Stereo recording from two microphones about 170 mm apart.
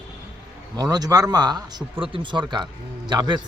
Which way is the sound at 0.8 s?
25° right (ahead or behind).